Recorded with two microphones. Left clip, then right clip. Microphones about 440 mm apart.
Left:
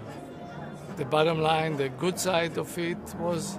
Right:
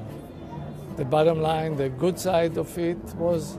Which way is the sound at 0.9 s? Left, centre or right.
Right.